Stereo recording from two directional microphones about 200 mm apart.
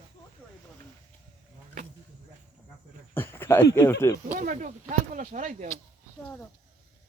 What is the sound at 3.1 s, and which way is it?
Speech, 10° left (ahead or behind).